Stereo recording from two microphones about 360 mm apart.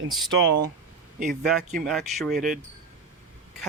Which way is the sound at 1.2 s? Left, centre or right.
Centre.